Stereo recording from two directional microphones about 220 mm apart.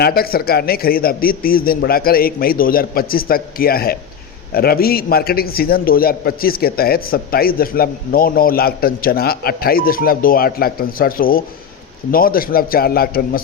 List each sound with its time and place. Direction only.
0.0 s a man's voice: 45° left (ahead or behind)